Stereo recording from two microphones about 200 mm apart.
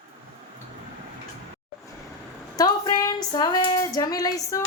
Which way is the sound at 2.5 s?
20° left (ahead or behind).